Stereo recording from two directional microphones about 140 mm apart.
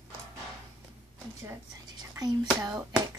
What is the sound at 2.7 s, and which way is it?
Speech, 10° right (ahead or behind).